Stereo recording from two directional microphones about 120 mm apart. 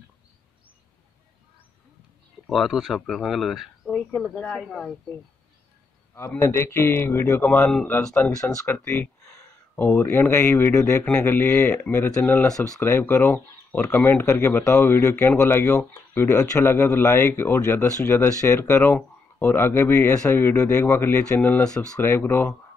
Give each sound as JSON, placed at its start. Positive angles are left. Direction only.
{"t": 2.4, "sound": "speech", "side_deg": 0}
{"t": 6.1, "sound": "speech", "side_deg": 20}
{"t": 8.1, "sound": "speech", "side_deg": 25}
{"t": 11.1, "sound": "speech", "side_deg": 15}
{"t": 12.4, "sound": "speech", "side_deg": 5}
{"t": 12.8, "sound": "speech", "side_deg": 20}
{"t": 21.9, "sound": "speech", "side_deg": 20}